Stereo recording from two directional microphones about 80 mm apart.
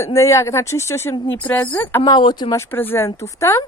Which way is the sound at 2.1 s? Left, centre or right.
Left.